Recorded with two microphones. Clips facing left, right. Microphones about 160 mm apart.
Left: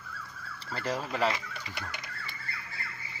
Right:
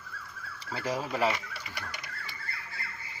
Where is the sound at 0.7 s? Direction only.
10° right (ahead or behind).